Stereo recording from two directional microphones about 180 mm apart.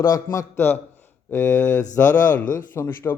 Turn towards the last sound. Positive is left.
turn(degrees=15)  # may be behind; listen again after turning